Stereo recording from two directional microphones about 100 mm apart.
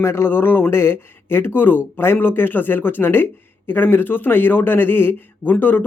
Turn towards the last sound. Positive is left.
turn(degrees=20)  # may be behind; listen again after turning